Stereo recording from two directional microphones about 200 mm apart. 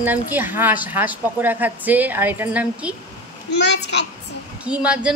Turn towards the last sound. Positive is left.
turn(degrees=-5)  # may be behind; listen again after turning